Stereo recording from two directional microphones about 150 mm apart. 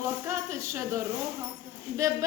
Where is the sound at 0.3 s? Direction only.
20° right (ahead or behind).